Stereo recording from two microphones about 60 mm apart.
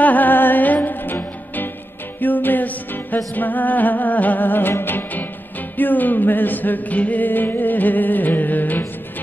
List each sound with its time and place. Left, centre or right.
0.0 s music: left